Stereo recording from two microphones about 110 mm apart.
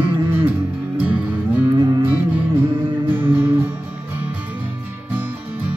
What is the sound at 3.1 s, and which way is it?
Music, 20° right (ahead or behind).